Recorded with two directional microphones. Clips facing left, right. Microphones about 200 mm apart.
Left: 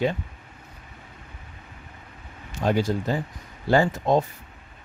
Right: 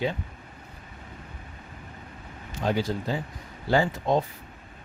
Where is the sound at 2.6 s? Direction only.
45° left (ahead or behind).